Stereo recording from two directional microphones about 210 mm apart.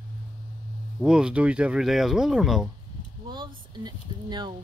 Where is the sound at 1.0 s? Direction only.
5° right (ahead or behind).